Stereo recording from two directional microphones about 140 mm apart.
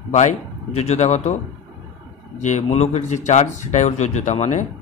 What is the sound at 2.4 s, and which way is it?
A man's voice, 55° left (ahead or behind).